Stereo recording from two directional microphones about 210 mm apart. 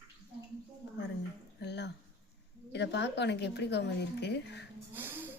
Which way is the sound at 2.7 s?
55° left (ahead or behind).